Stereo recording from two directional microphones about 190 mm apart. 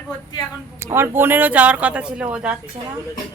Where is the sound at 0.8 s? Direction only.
10° right (ahead or behind).